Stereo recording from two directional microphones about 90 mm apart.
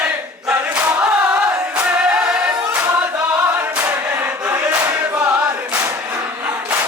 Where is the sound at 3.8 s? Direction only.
25° right (ahead or behind).